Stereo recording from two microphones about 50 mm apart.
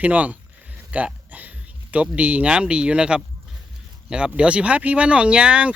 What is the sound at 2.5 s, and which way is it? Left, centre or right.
Speech, centre.